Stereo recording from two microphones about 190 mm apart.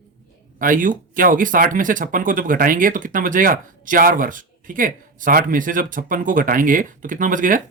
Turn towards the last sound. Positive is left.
turn(degrees=-45)  # may be behind; listen again after turning